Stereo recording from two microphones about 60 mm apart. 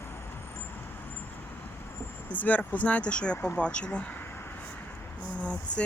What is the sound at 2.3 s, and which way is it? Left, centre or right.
Speech, left.